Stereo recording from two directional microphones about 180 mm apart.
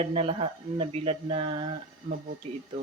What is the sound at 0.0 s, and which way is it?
Speech, 30° right (ahead or behind).